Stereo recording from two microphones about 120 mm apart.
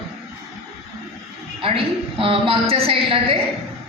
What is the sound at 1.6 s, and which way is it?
A woman's voice, 50° right (ahead or behind).